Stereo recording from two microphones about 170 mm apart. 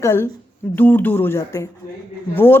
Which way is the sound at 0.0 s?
15° left (ahead or behind).